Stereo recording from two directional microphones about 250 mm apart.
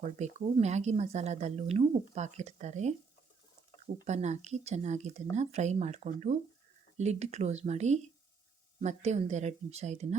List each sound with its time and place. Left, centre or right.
0.2 s a woman's voice: right
4.0 s a woman's voice: right